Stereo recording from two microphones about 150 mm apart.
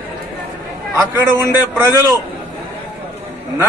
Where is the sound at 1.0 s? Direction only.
20° right (ahead or behind).